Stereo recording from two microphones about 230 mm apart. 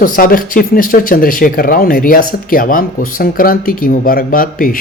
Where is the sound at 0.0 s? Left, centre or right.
Left.